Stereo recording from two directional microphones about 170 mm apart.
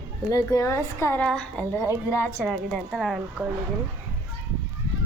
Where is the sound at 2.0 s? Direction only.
15° left (ahead or behind).